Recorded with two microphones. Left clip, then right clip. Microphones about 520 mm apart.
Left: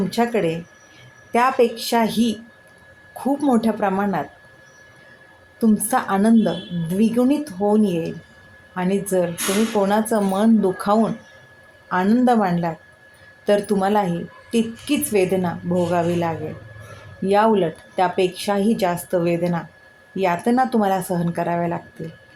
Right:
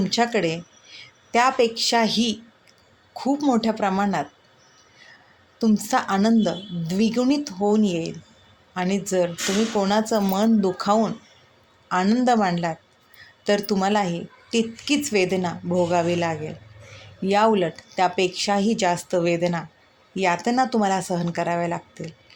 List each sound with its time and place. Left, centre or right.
0.1 s a woman's voice: left
5.5 s a woman's voice: left